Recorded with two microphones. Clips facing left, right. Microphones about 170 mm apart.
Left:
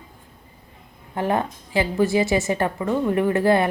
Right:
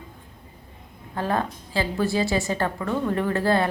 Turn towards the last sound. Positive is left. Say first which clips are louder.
# left 4 dB
turn(degrees=15)  # may be behind; listen again after turning